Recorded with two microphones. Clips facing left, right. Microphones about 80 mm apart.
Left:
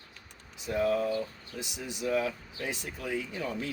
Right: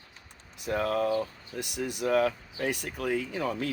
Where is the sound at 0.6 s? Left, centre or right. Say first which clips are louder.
Even; right.